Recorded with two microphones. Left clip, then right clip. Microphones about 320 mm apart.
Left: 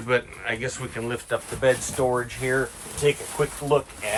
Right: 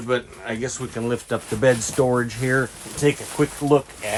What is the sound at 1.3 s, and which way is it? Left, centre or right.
Speech, right.